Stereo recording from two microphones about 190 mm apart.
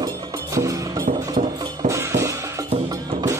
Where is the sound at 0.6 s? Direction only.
15° right (ahead or behind).